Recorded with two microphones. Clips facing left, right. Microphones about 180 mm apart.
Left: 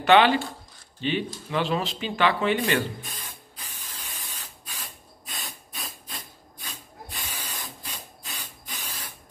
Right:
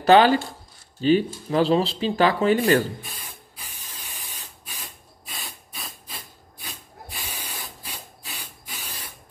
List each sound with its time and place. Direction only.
0.0 s speech: 40° right (ahead or behind)
4.1 s spray: 15° right (ahead or behind)
5.2 s hiss: centre (ahead or behind)
8.3 s rub: 15° right (ahead or behind)